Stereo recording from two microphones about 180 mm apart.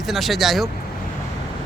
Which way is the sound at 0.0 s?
Centre (ahead or behind).